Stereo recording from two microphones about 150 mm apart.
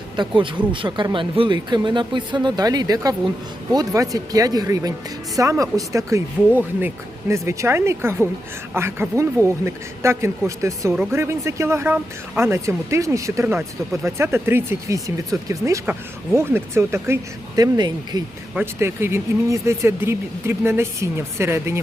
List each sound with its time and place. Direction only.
0.2 s speech: 35° right (ahead or behind)
18.5 s speech: 15° right (ahead or behind)